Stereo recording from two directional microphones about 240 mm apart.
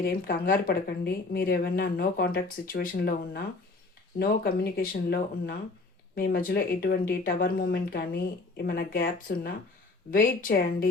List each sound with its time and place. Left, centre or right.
0.0 s speech: left